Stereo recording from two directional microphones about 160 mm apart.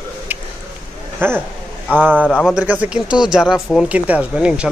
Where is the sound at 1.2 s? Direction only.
15° right (ahead or behind).